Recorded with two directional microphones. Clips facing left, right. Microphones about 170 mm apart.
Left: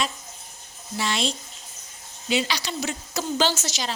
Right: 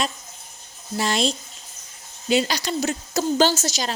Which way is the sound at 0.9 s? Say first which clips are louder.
Right 4 dB; 40° right (ahead or behind).